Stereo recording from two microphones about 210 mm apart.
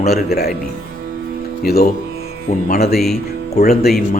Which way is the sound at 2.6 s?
40° left (ahead or behind).